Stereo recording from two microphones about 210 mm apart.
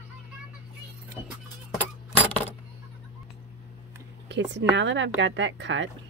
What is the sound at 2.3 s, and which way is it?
Keys jangling, 5° left (ahead or behind).